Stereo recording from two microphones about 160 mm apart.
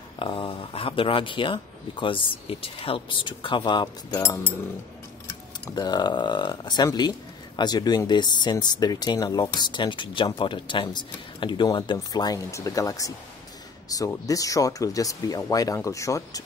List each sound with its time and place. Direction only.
0.2 s speech: 35° left (ahead or behind)
4.2 s speech: 15° left (ahead or behind)
5.7 s speech: 25° left (ahead or behind)